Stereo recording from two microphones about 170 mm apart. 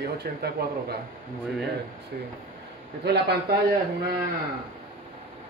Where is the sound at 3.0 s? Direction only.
70° right (ahead or behind).